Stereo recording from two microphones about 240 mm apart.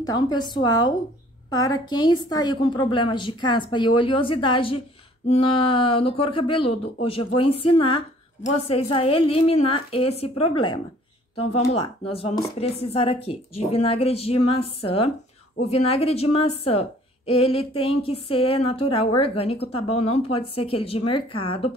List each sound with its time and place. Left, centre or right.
0.0 s a woman's voice: centre